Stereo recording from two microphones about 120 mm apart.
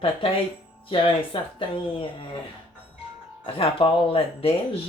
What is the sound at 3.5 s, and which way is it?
A woman's voice, 50° left (ahead or behind).